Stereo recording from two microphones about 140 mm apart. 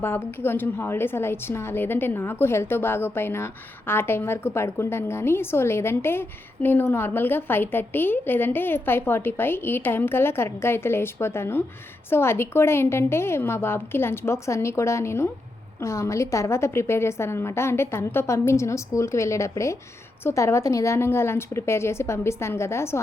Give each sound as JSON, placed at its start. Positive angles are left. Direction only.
{"t": 0.0, "sound": "a woman's voice", "side_deg": 15}